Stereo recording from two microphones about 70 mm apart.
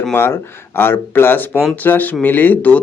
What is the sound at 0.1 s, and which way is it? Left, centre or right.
Speech, left.